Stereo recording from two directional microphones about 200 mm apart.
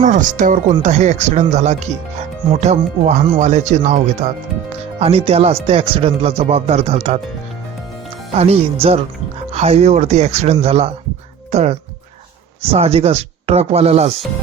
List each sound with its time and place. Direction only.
0.0 s speech: 40° right (ahead or behind)
8.4 s speech: 30° right (ahead or behind)